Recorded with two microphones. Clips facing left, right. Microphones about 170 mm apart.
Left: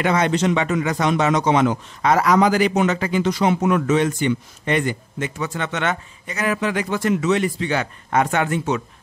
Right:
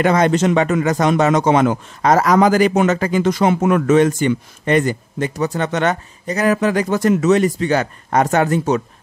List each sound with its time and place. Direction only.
0.0 s a man's voice: 45° right (ahead or behind)